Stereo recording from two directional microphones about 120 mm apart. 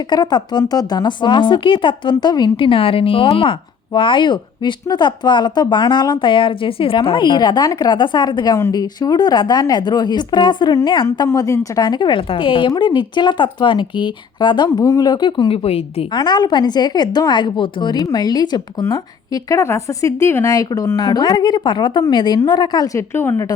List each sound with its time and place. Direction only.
0.1 s speech: 35° left (ahead or behind)
11.3 s speech: 25° left (ahead or behind); by 16.0 s 55° left (ahead or behind)
16.1 s a woman's voice: 35° left (ahead or behind); by 23.5 s 20° left (ahead or behind)